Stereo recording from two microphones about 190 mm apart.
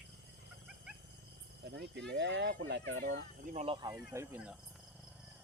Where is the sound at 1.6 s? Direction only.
65° right (ahead or behind).